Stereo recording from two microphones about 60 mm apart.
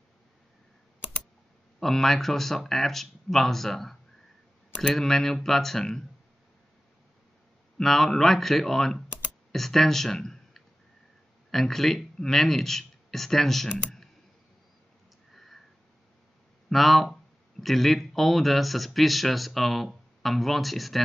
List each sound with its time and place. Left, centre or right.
1.8 s speech: centre
7.7 s speech: centre
15.3 s sniff: centre
16.6 s speech: centre